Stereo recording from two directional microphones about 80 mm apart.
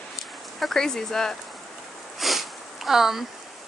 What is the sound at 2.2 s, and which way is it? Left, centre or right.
Sniff, centre.